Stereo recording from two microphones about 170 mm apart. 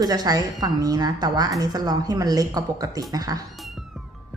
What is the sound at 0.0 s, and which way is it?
A woman's voice, 20° right (ahead or behind).